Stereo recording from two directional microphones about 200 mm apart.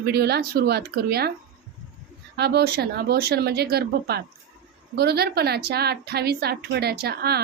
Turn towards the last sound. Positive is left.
turn(degrees=-55)  # may be behind; listen again after turning